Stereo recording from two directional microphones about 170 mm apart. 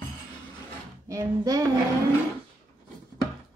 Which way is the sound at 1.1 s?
20° right (ahead or behind).